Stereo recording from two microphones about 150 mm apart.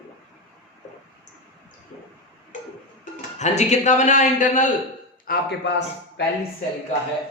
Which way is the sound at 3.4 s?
50° left (ahead or behind).